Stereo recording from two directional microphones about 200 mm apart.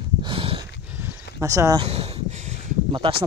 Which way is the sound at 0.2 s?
25° right (ahead or behind).